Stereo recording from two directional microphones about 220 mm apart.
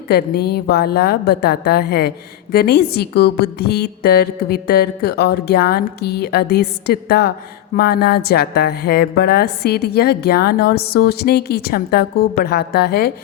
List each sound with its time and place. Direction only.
0.1 s a woman's voice: 45° left (ahead or behind)